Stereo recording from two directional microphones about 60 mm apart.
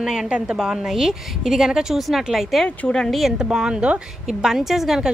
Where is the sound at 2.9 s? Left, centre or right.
Centre.